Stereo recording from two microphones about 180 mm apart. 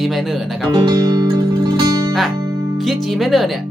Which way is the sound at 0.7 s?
20° right (ahead or behind).